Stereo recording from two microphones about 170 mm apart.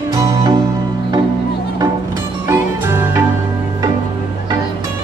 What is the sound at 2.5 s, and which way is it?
Music, 15° right (ahead or behind).